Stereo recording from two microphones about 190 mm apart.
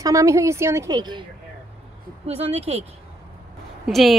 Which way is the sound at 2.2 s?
30° right (ahead or behind).